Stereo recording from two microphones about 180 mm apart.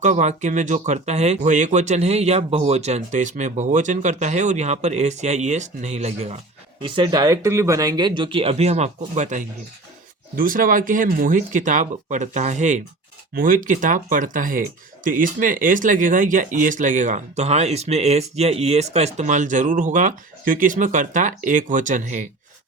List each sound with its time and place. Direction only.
0.0 s speech: 40° right (ahead or behind)
6.8 s speech: 25° right (ahead or behind)
10.3 s speech: 50° right (ahead or behind)